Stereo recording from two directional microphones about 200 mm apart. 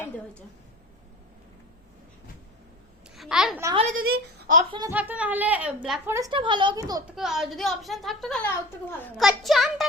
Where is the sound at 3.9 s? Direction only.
50° right (ahead or behind).